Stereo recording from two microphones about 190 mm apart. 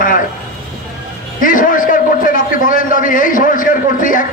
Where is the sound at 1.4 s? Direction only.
45° left (ahead or behind).